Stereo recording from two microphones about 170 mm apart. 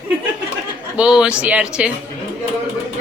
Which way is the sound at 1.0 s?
5° right (ahead or behind).